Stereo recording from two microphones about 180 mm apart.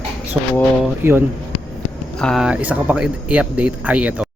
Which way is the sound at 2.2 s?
Centre (ahead or behind).